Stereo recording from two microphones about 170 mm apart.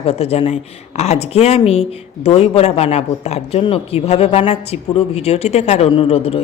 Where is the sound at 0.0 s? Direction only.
35° left (ahead or behind).